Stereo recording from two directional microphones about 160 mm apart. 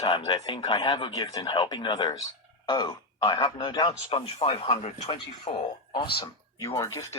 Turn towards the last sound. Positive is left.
turn(degrees=20)  # may be behind; listen again after turning